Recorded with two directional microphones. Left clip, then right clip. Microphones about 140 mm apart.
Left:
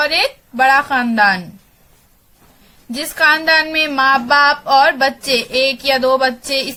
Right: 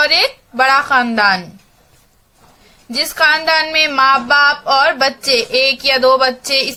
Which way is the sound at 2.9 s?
25° left (ahead or behind).